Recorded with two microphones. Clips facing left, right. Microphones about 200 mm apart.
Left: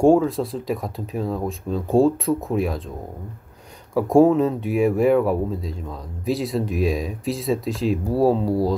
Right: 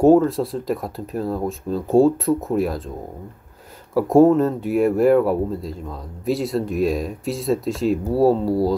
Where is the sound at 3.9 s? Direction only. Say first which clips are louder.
Right 2 dB; centre (ahead or behind).